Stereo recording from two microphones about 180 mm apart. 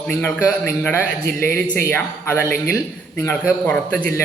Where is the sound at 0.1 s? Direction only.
10° left (ahead or behind).